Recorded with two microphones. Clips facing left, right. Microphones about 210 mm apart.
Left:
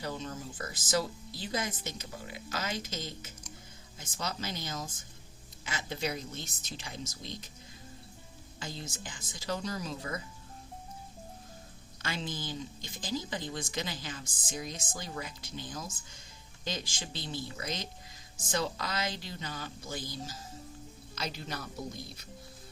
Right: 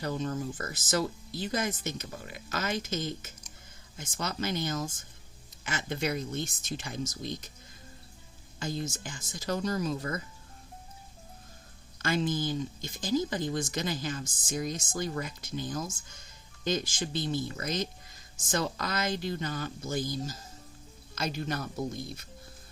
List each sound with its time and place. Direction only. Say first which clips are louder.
0.0 s speech: right 6 dB; 50° right (ahead or behind)
8.5 s speech: right 8 dB; 45° right (ahead or behind)
12.0 s speech: right 9 dB; 50° right (ahead or behind)